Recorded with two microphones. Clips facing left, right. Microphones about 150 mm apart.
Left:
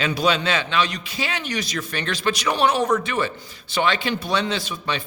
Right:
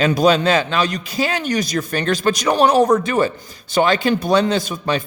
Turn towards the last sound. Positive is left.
turn(degrees=-45)  # may be behind; listen again after turning